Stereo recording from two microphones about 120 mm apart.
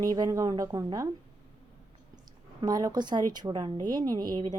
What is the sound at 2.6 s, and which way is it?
A woman's voice, 35° right (ahead or behind).